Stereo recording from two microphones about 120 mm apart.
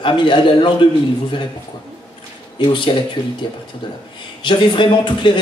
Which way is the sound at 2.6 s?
45° left (ahead or behind).